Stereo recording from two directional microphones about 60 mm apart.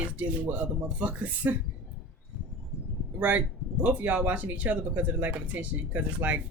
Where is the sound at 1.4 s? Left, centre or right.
Right.